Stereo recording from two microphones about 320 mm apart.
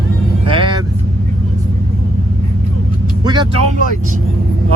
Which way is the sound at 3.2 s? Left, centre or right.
Centre.